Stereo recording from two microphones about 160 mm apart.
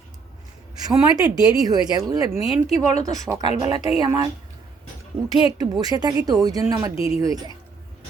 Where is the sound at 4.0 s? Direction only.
25° right (ahead or behind).